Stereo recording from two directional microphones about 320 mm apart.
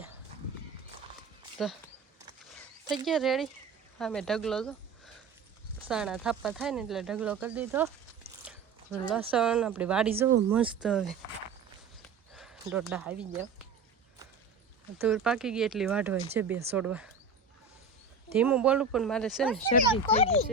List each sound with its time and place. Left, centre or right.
1.5 s a sound: centre
3.1 s speech: centre
5.9 s speech: centre
12.3 s speech: centre
15.0 s speech: centre
18.3 s speech: centre
20.1 s speech: centre